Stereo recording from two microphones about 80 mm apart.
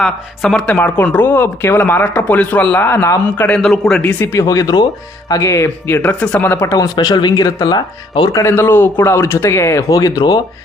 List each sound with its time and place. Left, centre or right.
0.0 s speech: centre
0.9 s speech: centre
3.6 s speech: centre
4.3 s a man's voice: left
6.0 s speech: centre
6.4 s speech: left
6.7 s speech: left
8.3 s a man's voice: left
8.5 s a man's voice: left
9.9 s speech: left